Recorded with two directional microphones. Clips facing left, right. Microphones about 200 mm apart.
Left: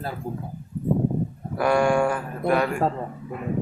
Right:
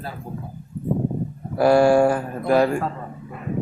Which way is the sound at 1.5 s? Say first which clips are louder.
Right 5 dB; 35° right (ahead or behind).